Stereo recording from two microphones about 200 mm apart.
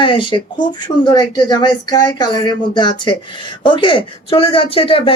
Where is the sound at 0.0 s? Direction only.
25° left (ahead or behind).